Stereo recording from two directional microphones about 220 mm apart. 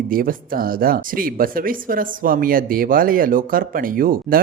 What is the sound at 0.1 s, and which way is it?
Speech, 40° right (ahead or behind).